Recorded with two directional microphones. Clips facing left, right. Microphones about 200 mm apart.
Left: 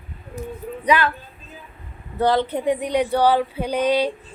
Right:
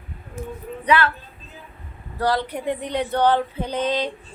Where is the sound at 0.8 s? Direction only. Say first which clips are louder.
Even; 15° left (ahead or behind).